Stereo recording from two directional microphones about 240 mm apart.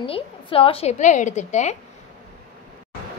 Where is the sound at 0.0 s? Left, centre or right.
Left.